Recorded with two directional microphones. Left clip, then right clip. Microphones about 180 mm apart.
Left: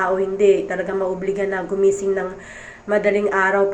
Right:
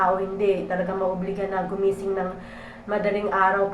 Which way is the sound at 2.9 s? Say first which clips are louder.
Left 6 dB; 25° left (ahead or behind).